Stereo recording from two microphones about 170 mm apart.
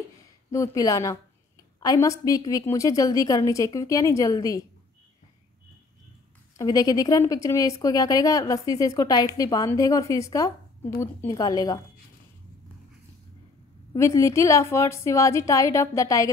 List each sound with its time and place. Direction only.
0.5 s speech: 20° left (ahead or behind)
6.6 s speech: 20° left (ahead or behind)
13.9 s a woman's voice: 15° left (ahead or behind)